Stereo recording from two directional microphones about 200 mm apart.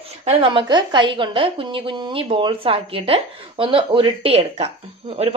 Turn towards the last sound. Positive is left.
turn(degrees=-30)  # may be behind; listen again after turning